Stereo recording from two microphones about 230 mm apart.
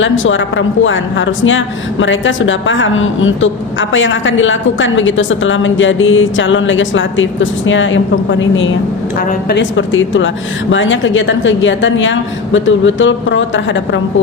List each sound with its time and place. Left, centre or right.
0.0 s a woman's voice: left